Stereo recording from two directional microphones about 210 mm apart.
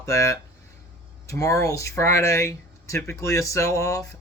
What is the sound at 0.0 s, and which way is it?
Speech, 15° left (ahead or behind).